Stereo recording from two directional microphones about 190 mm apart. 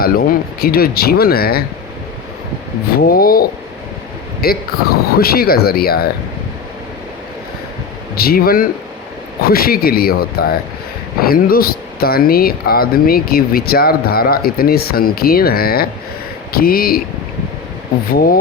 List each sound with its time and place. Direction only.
0.0 s speech: 50° left (ahead or behind)
3.1 s speech: 50° left (ahead or behind)
4.4 s speech: 55° left (ahead or behind)
8.1 s speech: 50° left (ahead or behind)
18.1 s speech: 50° left (ahead or behind)